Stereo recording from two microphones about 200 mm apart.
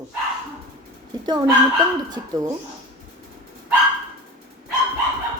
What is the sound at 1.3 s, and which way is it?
Speech, 20° right (ahead or behind).